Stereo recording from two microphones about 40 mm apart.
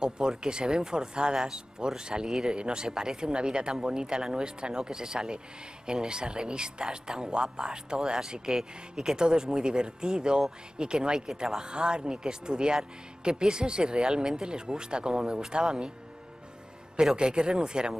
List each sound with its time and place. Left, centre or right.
0.0 s speech: centre
16.9 s speech: centre